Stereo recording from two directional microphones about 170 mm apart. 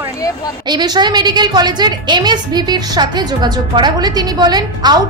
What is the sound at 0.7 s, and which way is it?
A woman's voice, 25° right (ahead or behind).